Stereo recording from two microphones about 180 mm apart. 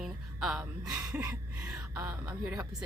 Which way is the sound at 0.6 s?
15° right (ahead or behind).